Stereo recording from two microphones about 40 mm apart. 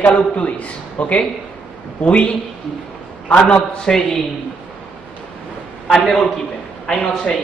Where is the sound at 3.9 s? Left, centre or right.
Centre.